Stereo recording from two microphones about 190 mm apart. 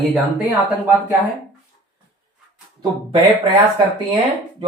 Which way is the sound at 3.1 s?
30° right (ahead or behind).